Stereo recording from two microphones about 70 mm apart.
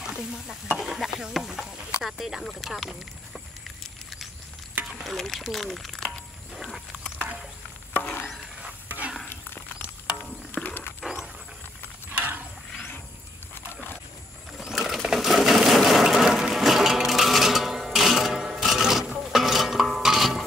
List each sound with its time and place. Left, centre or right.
0.0 s stir: centre
0.7 s speech: centre
5.0 s speech: centre
6.5 s wild animals: centre
7.9 s a sound: left
8.8 s a sound: right
10.5 s walk: left
12.1 s a sound: right
14.6 s sewing machine: centre
16.3 s music: centre